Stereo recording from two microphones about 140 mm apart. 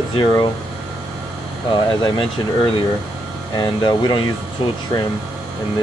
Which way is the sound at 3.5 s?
30° left (ahead or behind).